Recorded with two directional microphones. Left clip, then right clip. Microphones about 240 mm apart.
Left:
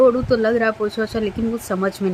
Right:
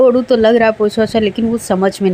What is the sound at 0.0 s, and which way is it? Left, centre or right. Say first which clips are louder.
A woman's voice: right 5 dB; right.